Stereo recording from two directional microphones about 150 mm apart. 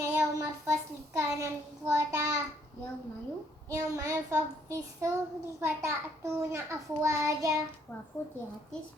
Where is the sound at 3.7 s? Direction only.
20° right (ahead or behind).